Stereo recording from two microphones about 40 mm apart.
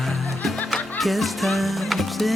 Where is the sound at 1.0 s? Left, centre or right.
Centre.